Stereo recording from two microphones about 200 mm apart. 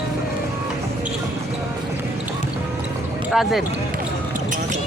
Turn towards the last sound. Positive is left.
turn(degrees=0)  # may be behind; listen again after turning